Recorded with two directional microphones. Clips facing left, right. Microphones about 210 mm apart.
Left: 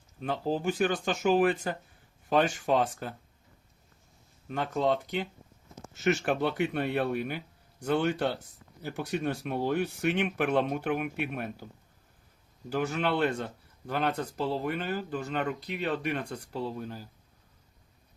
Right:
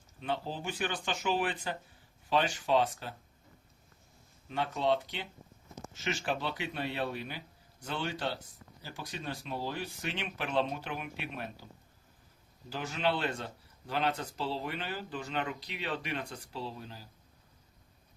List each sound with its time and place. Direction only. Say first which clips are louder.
0.2 s speech: left 6 dB; 45° left (ahead or behind)
4.4 s speech: left 3 dB; 45° left (ahead or behind)
8.8 s speech: left 11 dB; 65° left (ahead or behind)
12.7 s speech: left 4 dB; 55° left (ahead or behind)